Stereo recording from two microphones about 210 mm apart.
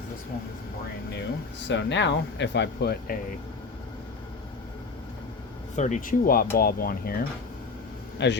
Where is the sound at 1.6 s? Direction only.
60° left (ahead or behind).